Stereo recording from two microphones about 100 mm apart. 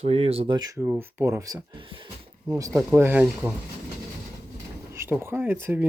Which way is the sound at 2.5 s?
35° right (ahead or behind).